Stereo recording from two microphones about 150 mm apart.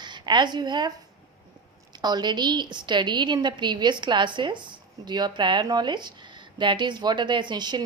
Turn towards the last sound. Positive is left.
turn(degrees=-30)  # may be behind; listen again after turning